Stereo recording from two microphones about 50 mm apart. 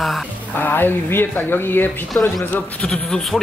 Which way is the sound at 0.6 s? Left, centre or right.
Left.